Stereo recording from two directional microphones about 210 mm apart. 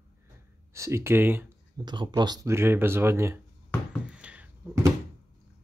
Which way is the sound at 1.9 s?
20° right (ahead or behind).